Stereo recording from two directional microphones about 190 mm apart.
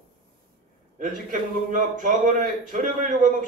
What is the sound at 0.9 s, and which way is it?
A man's voice, 45° right (ahead or behind).